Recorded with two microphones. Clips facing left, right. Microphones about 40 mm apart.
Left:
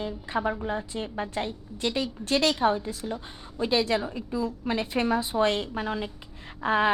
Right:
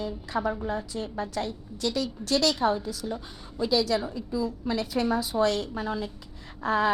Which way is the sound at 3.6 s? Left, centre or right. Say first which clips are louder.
Even; left.